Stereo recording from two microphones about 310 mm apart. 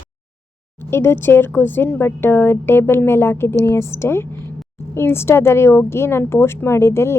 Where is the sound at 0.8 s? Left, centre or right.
Centre.